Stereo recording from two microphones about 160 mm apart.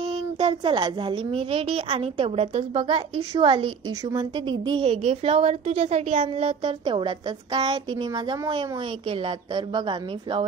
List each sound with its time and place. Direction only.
0.4 s a woman's voice: 30° right (ahead or behind)
9.8 s a woman's voice: 30° right (ahead or behind)